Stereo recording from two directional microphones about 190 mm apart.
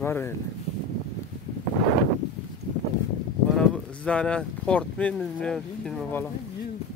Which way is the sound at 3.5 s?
5° left (ahead or behind).